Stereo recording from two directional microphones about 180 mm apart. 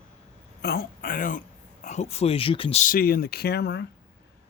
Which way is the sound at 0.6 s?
55° left (ahead or behind).